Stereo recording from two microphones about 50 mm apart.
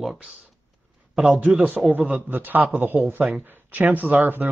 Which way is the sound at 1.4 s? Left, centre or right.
Right.